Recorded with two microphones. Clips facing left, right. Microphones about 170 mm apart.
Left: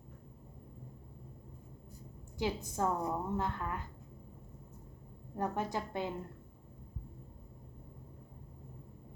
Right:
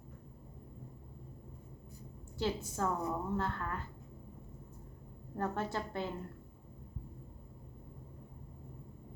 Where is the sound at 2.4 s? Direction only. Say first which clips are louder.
Left 1 dB; 15° left (ahead or behind).